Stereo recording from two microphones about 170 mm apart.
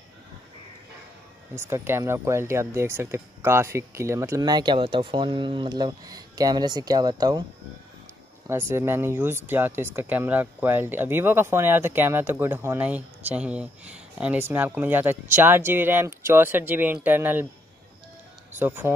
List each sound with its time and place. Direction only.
1.5 s speech: 15° right (ahead or behind)
8.5 s speech: 15° right (ahead or behind)
18.6 s speech: 10° right (ahead or behind)